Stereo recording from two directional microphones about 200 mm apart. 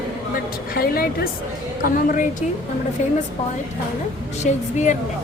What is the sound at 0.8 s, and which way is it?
A woman's voice, 50° left (ahead or behind).